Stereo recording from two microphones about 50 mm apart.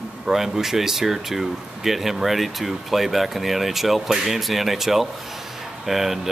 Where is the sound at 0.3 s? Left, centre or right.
Centre.